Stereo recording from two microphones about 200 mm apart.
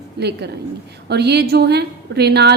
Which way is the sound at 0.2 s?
55° right (ahead or behind).